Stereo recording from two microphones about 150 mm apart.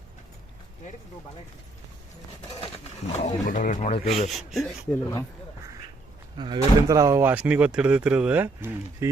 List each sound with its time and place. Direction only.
2.5 s speech: 40° left (ahead or behind)
4.3 s speech: centre (ahead or behind)
6.3 s speech: 30° right (ahead or behind); by 9.0 s 15° right (ahead or behind)